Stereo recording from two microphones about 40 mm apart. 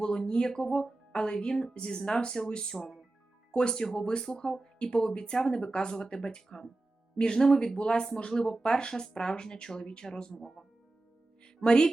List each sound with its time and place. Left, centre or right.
0.0 s speech: centre
10.4 s speech: centre
11.4 s music: centre